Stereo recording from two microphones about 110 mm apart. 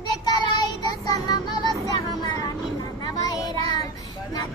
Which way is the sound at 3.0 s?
40° left (ahead or behind).